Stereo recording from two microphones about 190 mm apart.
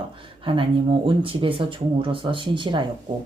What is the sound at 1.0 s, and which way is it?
Speech, 30° right (ahead or behind).